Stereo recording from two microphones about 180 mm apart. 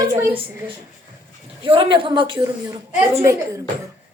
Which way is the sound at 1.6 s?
30° right (ahead or behind).